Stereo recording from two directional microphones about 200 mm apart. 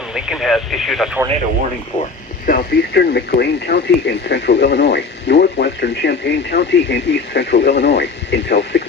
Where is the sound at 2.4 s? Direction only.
50° left (ahead or behind).